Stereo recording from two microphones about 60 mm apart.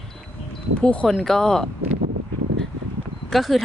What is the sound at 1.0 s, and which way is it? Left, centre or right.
Speech, centre.